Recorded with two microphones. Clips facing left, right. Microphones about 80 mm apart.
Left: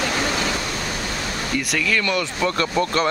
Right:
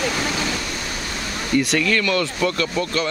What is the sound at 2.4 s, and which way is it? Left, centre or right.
Speech, left.